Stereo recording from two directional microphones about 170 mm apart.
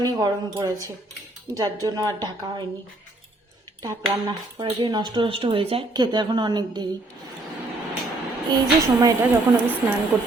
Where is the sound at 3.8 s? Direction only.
25° right (ahead or behind).